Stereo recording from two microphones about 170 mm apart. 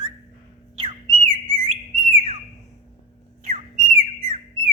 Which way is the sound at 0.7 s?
30° right (ahead or behind).